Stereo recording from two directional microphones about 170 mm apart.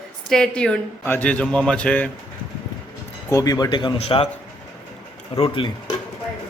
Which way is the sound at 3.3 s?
20° left (ahead or behind).